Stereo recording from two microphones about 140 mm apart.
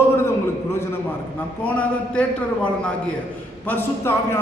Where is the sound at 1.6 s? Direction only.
10° left (ahead or behind).